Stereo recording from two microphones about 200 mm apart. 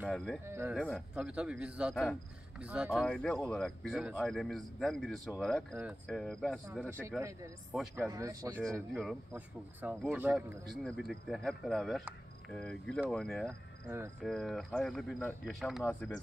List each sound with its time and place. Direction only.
0.0 s speech: centre (ahead or behind)
0.5 s speech: 10° right (ahead or behind)
0.7 s speech: 5° left (ahead or behind)
7.2 s speech: 15° right (ahead or behind); by 13.6 s centre (ahead or behind)
13.8 s speech: 15° right (ahead or behind)
14.2 s speech: centre (ahead or behind)